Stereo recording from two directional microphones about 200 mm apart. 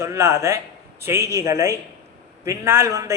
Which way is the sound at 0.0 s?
15° right (ahead or behind).